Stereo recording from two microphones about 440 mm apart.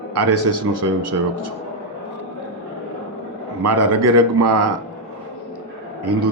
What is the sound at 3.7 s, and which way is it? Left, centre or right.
Speech, right.